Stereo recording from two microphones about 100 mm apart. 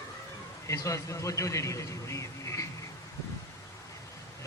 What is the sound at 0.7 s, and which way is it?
A man's voice, 30° left (ahead or behind).